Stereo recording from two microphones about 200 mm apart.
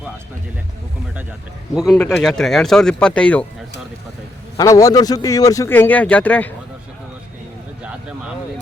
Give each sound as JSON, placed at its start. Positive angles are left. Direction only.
{"t": 1.7, "sound": "speech", "side_deg": 0}
{"t": 4.5, "sound": "a man's voice", "side_deg": 15}